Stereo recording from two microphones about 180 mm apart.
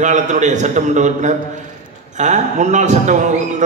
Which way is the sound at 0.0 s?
40° right (ahead or behind).